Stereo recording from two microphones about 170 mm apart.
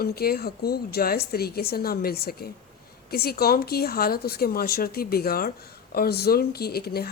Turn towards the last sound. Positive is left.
turn(degrees=65)  # may be behind; listen again after turning